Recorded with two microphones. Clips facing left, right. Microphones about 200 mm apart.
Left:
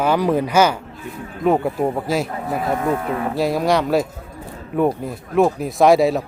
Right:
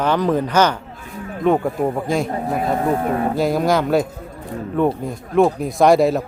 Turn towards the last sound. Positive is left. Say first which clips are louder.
# even
turn(degrees=0)  # may be behind; listen again after turning